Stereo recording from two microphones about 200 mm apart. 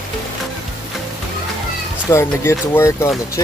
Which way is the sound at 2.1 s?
15° left (ahead or behind).